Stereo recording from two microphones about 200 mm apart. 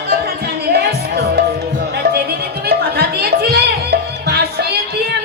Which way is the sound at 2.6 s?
50° right (ahead or behind).